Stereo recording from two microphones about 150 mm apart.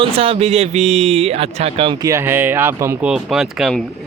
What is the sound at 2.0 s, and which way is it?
Speech, 20° right (ahead or behind).